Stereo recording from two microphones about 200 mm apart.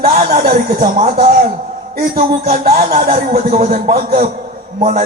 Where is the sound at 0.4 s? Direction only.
45° right (ahead or behind).